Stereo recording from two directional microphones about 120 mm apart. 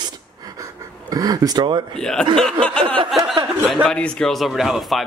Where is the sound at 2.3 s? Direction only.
5° left (ahead or behind).